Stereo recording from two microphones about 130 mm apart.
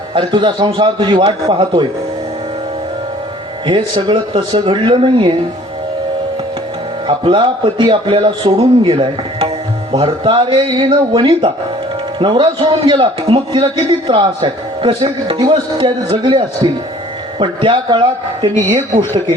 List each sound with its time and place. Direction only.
0.1 s a man's voice: 40° right (ahead or behind)
3.7 s a man's voice: 40° right (ahead or behind)
7.1 s a man's voice: 40° right (ahead or behind)
15.0 s a man's voice: 30° right (ahead or behind)